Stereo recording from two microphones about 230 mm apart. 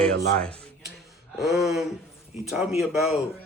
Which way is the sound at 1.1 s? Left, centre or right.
Centre.